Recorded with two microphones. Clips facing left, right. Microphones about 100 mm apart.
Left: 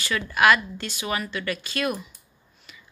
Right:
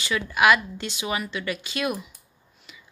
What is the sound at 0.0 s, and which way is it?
A woman's voice, 15° right (ahead or behind).